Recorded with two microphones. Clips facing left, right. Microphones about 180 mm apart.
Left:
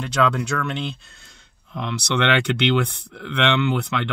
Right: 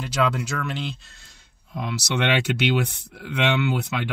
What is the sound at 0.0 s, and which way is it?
Speech, 5° right (ahead or behind).